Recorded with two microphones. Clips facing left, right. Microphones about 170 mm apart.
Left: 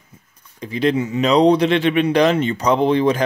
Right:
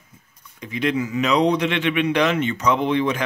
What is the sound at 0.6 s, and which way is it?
Speech, 35° left (ahead or behind).